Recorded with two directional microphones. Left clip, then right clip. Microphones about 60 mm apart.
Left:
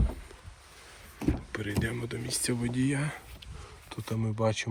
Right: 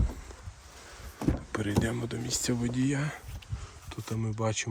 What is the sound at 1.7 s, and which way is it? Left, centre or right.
Speech, right.